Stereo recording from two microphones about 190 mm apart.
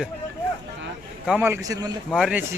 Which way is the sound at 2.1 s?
Centre (ahead or behind).